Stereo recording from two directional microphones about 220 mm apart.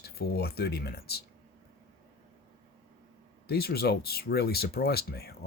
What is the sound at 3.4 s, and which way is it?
Speech, 45° left (ahead or behind).